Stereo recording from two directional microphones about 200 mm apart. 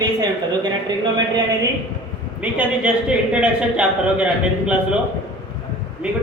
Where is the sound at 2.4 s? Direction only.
5° right (ahead or behind).